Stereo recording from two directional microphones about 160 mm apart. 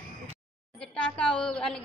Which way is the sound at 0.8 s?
5° left (ahead or behind).